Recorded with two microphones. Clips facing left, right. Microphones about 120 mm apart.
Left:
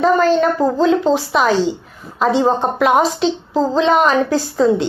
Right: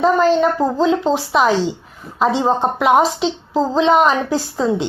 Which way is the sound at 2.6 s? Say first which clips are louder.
Even; 20° right (ahead or behind).